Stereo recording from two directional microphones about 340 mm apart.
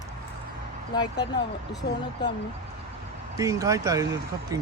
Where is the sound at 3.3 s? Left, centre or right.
Centre.